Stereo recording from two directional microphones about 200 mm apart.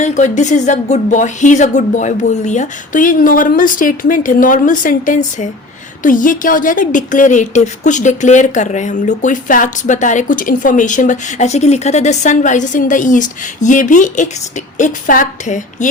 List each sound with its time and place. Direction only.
0.0 s a woman's voice: 35° left (ahead or behind)